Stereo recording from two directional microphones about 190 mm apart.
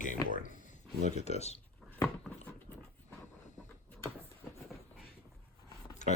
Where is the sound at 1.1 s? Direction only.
35° left (ahead or behind).